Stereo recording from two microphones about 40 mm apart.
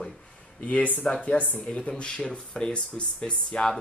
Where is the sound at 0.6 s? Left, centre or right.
Left.